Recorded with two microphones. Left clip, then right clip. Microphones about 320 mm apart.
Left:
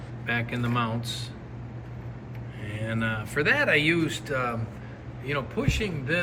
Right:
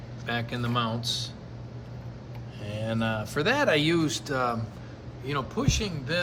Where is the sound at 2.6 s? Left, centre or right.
Centre.